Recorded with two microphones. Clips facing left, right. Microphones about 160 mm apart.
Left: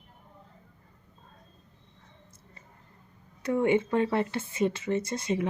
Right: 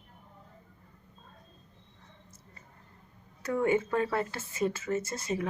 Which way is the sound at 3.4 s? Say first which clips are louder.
Left 3 dB; 25° left (ahead or behind).